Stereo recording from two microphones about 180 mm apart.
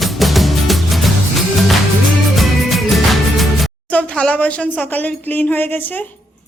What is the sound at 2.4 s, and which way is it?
Music, centre (ahead or behind).